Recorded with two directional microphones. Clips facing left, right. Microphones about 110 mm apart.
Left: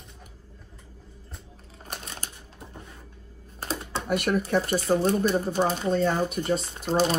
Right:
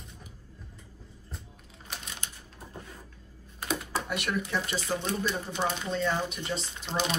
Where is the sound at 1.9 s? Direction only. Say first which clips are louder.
Left 4 dB; 40° left (ahead or behind).